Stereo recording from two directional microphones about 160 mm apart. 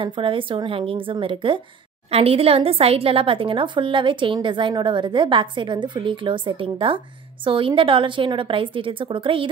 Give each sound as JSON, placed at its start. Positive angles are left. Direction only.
{"t": 0.0, "sound": "a woman's voice", "side_deg": -30}